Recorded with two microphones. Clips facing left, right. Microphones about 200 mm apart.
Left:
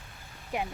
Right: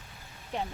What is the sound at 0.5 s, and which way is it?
Speech, 10° left (ahead or behind).